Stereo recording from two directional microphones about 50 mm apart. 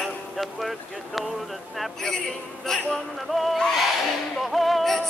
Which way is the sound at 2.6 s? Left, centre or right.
Centre.